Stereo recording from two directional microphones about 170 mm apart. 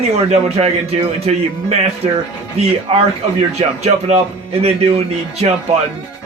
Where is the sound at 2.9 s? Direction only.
35° right (ahead or behind).